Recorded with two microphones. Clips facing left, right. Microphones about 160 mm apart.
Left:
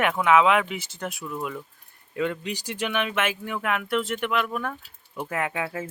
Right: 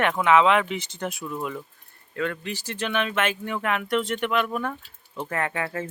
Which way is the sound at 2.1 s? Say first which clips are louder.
Left 1 dB; 15° left (ahead or behind).